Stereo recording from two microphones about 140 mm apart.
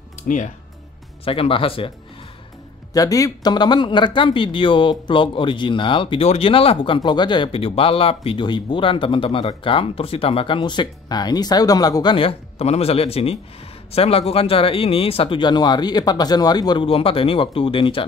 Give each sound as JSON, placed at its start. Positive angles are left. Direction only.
{"t": 1.2, "sound": "speech", "side_deg": 40}
{"t": 2.9, "sound": "speech", "side_deg": 25}